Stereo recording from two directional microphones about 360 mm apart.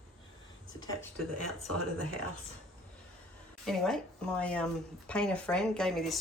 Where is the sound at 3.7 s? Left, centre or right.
Centre.